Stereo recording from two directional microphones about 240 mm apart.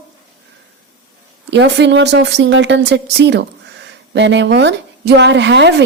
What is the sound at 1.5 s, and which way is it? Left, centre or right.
A woman's voice, right.